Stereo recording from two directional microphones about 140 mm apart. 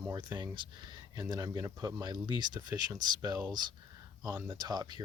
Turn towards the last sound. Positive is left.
turn(degrees=-30)  # may be behind; listen again after turning